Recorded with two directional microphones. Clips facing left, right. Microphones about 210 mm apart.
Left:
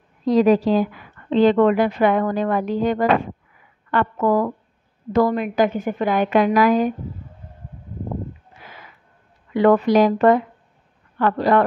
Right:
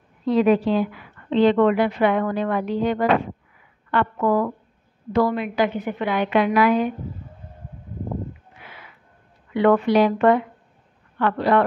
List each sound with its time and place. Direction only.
0.2 s speech: 40° left (ahead or behind)
8.5 s a sound: 40° left (ahead or behind)
9.5 s speech: 40° left (ahead or behind)